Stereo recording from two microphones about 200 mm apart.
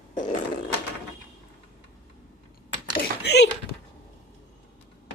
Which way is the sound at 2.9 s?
55° left (ahead or behind).